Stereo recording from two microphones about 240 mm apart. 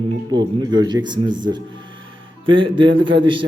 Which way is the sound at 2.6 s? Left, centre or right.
Right.